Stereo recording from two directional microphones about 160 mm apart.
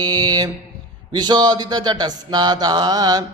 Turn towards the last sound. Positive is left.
turn(degrees=-25)  # may be behind; listen again after turning